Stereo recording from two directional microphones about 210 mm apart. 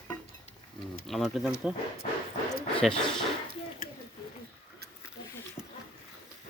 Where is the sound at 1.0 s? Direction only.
Centre (ahead or behind).